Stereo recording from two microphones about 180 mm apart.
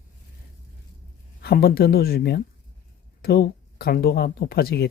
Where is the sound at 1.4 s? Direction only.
60° left (ahead or behind).